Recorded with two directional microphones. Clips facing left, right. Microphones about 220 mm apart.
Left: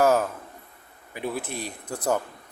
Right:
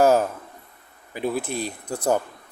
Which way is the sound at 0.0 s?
30° right (ahead or behind).